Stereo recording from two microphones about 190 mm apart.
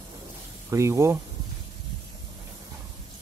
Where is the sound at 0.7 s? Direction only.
15° right (ahead or behind).